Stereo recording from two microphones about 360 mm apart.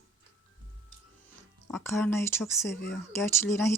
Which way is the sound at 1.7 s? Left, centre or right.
Centre.